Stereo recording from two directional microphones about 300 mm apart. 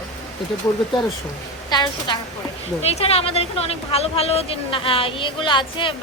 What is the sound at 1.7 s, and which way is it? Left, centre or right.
A woman's voice, centre.